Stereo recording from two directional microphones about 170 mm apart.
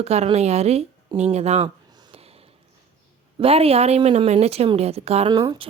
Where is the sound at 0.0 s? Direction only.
40° right (ahead or behind).